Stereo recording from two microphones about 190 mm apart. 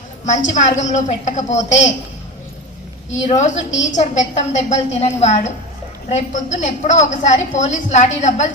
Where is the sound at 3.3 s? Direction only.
40° left (ahead or behind).